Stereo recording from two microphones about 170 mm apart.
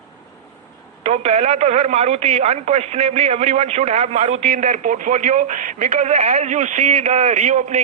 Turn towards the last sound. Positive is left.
turn(degrees=-40)  # may be behind; listen again after turning